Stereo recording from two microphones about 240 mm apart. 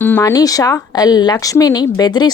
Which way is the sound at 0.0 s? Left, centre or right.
Centre.